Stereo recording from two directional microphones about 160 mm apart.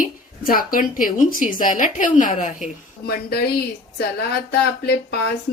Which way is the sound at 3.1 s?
75° left (ahead or behind).